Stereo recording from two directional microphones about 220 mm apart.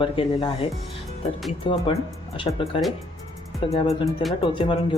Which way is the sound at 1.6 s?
25° left (ahead or behind).